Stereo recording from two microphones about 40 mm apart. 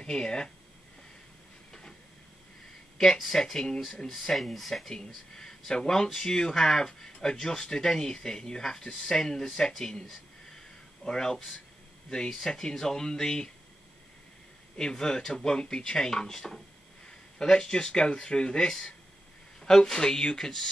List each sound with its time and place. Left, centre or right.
0.0 s speech: centre
1.7 s train: centre
3.0 s speech: centre
4.9 s speech: centre
11.1 s speech: centre
14.8 s speech: centre